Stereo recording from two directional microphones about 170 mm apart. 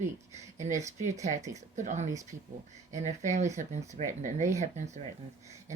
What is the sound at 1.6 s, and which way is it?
Speech, 45° right (ahead or behind).